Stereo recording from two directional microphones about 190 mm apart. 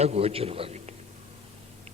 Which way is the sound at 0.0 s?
35° right (ahead or behind).